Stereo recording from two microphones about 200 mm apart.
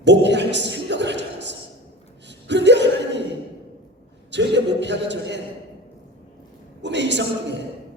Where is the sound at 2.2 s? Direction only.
60° right (ahead or behind).